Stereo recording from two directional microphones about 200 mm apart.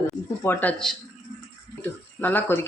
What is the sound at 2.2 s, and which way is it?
Speech, 10° left (ahead or behind).